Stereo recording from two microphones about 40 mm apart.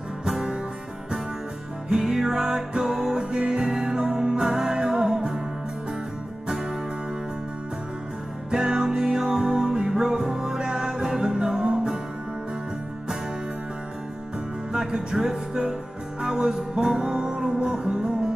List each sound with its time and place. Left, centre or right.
0.2 s music: centre
2.0 s music: centre
8.5 s music: centre
14.7 s music: centre